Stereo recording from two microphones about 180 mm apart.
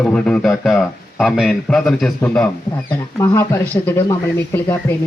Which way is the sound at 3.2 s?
10° left (ahead or behind).